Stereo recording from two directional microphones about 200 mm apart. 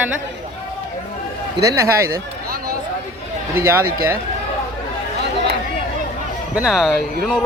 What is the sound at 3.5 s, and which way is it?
Speech, 15° right (ahead or behind).